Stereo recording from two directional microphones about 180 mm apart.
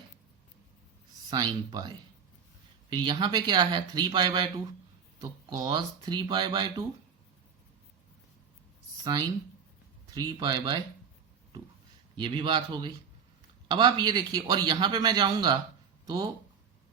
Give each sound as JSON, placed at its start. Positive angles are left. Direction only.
{"t": 1.3, "sound": "speech", "side_deg": -20}
{"t": 2.9, "sound": "speech", "side_deg": -25}
{"t": 10.2, "sound": "speech", "side_deg": -25}
{"t": 12.1, "sound": "speech", "side_deg": -25}